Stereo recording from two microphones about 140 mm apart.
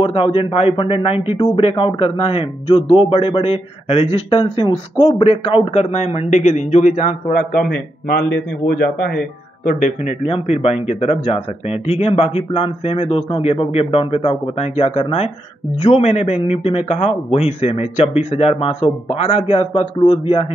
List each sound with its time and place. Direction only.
0.0 s a man's voice: 40° left (ahead or behind); by 8.2 s 85° left
9.7 s speech: 65° left (ahead or behind); by 20.4 s 40° left (ahead or behind)